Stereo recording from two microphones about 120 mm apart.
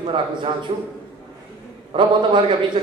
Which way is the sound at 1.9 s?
45° right (ahead or behind).